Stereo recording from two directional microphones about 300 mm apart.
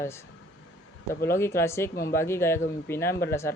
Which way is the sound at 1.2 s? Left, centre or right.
Centre.